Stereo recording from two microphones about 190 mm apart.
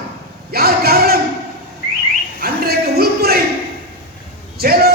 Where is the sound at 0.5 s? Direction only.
55° right (ahead or behind).